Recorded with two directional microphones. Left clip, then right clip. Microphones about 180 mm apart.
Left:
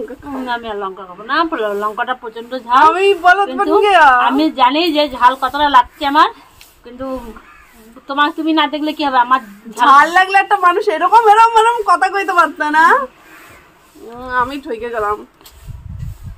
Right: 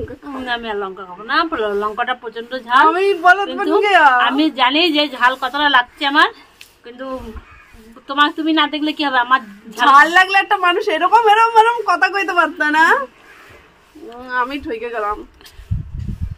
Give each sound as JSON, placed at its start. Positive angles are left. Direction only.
{"t": 0.4, "sound": "speech", "side_deg": -15}
{"t": 2.9, "sound": "a woman's voice", "side_deg": 10}
{"t": 4.2, "sound": "speech", "side_deg": -10}
{"t": 8.1, "sound": "speech", "side_deg": -10}
{"t": 9.9, "sound": "a woman's voice", "side_deg": 5}
{"t": 14.2, "sound": "a woman's voice", "side_deg": 10}